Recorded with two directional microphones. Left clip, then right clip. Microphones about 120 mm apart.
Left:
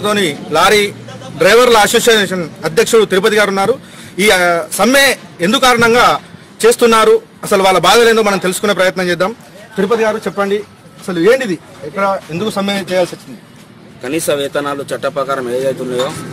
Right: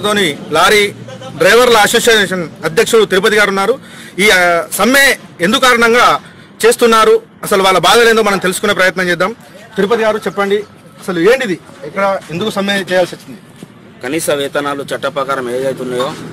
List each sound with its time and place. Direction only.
0.0 s a man's voice: 15° left (ahead or behind); by 12.7 s 35° left (ahead or behind)
12.7 s a man's voice: 10° left (ahead or behind)